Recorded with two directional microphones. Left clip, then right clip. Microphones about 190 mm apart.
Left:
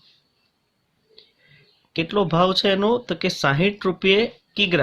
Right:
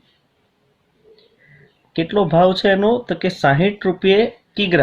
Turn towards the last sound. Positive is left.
turn(degrees=35)  # may be behind; listen again after turning